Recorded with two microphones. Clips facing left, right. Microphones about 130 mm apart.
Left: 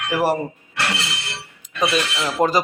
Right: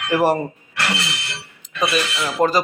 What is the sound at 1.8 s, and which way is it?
Speech, 20° left (ahead or behind).